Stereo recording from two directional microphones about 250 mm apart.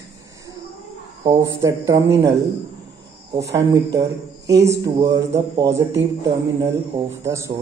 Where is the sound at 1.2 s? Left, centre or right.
Centre.